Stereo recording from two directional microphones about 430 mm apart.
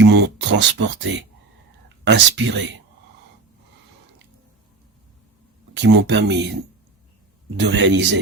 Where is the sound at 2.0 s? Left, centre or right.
Right.